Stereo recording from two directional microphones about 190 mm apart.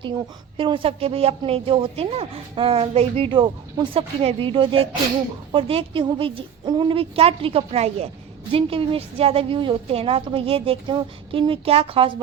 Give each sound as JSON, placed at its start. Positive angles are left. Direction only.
{"t": 0.0, "sound": "a woman's voice", "side_deg": -25}